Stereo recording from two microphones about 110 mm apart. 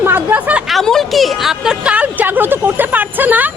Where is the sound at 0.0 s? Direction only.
20° right (ahead or behind).